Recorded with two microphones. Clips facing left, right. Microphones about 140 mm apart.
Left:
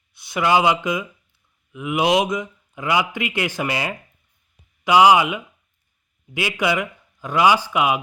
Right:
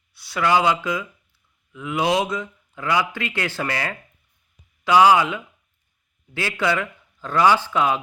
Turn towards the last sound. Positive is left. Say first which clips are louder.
# left 1 dB
turn(degrees=15)  # may be behind; listen again after turning